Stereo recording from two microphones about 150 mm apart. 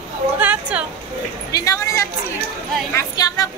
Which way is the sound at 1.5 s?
25° left (ahead or behind).